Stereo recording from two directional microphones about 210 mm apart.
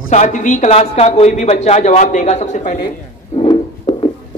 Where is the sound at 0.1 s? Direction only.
35° left (ahead or behind).